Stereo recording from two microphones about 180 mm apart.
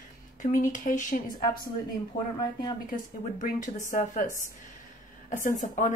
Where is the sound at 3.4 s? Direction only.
45° left (ahead or behind).